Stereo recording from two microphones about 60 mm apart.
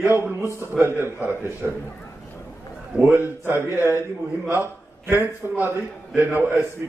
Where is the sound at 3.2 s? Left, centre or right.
Right.